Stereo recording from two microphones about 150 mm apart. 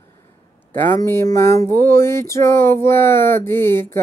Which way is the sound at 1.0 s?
20° left (ahead or behind).